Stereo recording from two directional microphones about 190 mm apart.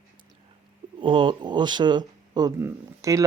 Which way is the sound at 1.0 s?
25° right (ahead or behind).